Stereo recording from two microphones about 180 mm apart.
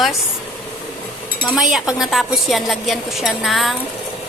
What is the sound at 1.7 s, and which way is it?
A woman's voice, centre (ahead or behind).